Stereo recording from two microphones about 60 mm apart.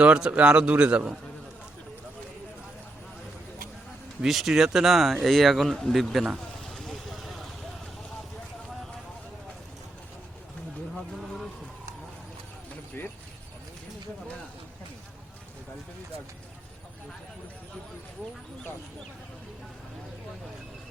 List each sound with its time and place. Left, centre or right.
0.0 s speech: centre
4.2 s speech: centre
13.0 s a sound: left